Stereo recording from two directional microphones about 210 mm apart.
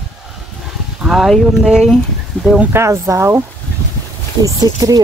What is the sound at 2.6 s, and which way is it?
Speech, 15° right (ahead or behind).